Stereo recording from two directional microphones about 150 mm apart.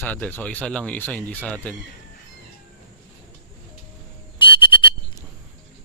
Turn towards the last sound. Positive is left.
turn(degrees=35)  # may be behind; listen again after turning